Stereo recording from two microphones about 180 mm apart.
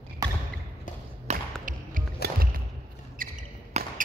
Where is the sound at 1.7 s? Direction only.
50° right (ahead or behind).